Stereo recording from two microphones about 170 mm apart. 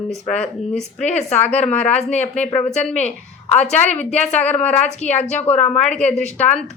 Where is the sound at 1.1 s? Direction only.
40° left (ahead or behind).